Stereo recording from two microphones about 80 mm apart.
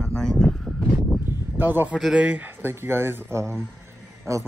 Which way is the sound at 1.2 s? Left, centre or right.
Right.